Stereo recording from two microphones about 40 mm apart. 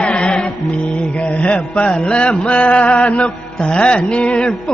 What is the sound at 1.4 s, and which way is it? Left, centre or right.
Music, left.